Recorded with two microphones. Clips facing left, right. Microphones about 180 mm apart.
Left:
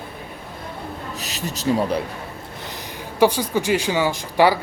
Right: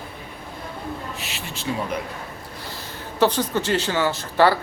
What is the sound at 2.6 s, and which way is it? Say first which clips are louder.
Speech: left 2 dB; 15° left (ahead or behind).